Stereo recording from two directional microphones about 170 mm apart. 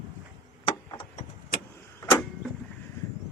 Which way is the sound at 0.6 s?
30° left (ahead or behind).